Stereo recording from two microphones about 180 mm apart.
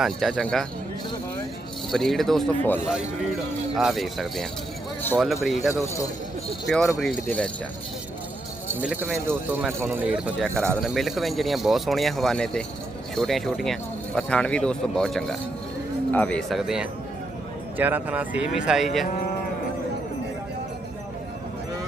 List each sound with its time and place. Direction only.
0.0 s speech: centre (ahead or behind)
1.9 s speech: centre (ahead or behind)
5.8 s speech: 15° left (ahead or behind)
8.8 s speech: 5° right (ahead or behind)
10.8 s speech: centre (ahead or behind)